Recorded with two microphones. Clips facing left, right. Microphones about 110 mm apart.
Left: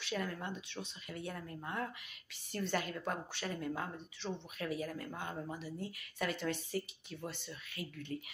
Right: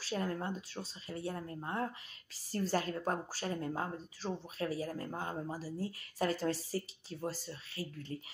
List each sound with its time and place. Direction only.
0.0 s speech: 35° right (ahead or behind)